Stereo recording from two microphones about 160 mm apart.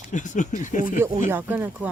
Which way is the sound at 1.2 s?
15° right (ahead or behind).